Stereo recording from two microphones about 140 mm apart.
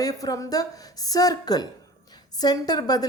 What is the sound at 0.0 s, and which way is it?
A woman's voice, 25° left (ahead or behind).